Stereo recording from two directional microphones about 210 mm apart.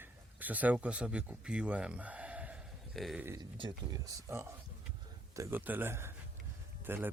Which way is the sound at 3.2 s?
15° right (ahead or behind).